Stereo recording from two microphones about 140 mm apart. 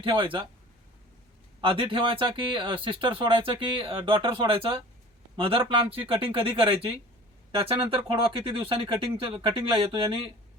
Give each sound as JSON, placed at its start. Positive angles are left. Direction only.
{"t": 0.0, "sound": "speech", "side_deg": -40}
{"t": 1.6, "sound": "speech", "side_deg": -40}